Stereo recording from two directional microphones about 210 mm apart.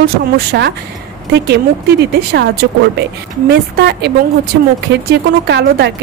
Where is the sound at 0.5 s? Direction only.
55° right (ahead or behind).